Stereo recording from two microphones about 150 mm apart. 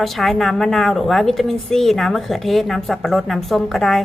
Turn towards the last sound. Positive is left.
turn(degrees=0)  # may be behind; listen again after turning